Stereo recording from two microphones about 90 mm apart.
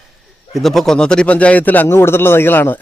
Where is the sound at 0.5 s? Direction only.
Centre (ahead or behind).